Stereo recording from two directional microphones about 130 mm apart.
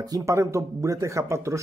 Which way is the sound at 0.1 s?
25° right (ahead or behind).